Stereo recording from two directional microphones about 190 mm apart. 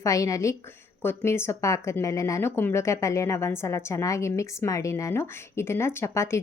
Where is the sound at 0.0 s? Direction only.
15° left (ahead or behind).